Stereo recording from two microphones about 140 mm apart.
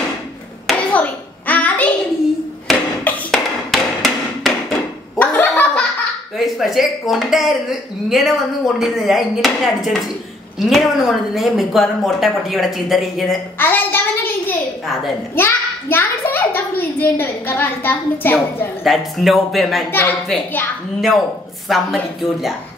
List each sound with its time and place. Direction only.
0.7 s hands: 10° left (ahead or behind)
3.0 s music: 10° left (ahead or behind)
3.7 s hammer: centre (ahead or behind)
5.5 s laughter: 10° left (ahead or behind)
6.3 s speech: centre (ahead or behind)
10.6 s speech: centre (ahead or behind)
13.6 s a sound: 15° left (ahead or behind)
15.3 s a child's voice: 15° left (ahead or behind)
18.9 s speech: centre (ahead or behind)
19.9 s a child's voice: 15° left (ahead or behind)
21.6 s speech: centre (ahead or behind)